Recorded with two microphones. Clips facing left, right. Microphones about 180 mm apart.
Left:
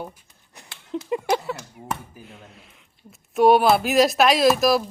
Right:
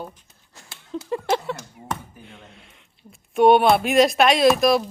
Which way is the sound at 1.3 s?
Centre (ahead or behind).